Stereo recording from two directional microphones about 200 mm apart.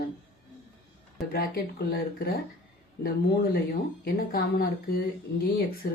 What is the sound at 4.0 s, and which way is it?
A woman's voice, 50° left (ahead or behind).